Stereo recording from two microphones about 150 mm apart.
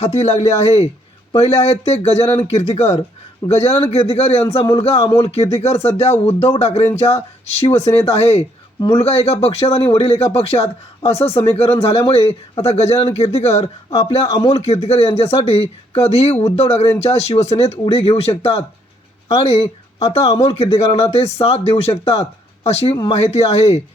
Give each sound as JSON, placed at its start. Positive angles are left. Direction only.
{"t": 0.0, "sound": "speech", "side_deg": 45}